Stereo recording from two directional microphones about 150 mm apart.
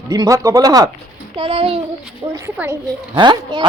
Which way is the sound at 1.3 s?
40° right (ahead or behind).